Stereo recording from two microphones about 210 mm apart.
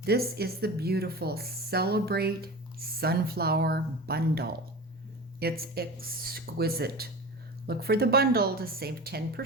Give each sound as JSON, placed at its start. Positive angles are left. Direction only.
{"t": 0.0, "sound": "speech", "side_deg": -50}